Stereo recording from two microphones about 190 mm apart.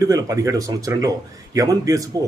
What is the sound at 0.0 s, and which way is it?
Speech, 20° right (ahead or behind).